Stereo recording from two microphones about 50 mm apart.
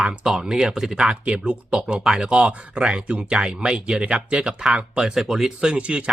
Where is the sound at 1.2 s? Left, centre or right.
Right.